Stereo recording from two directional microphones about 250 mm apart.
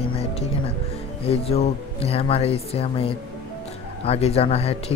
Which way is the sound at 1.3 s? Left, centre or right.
Left.